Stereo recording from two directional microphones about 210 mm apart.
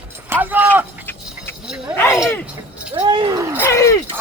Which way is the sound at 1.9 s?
10° left (ahead or behind).